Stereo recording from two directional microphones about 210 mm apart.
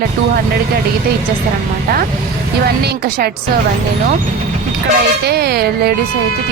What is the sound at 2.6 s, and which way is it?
Speech, 50° right (ahead or behind).